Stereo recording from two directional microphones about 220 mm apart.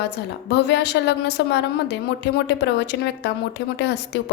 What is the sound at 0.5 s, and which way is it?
A woman's voice, 50° left (ahead or behind).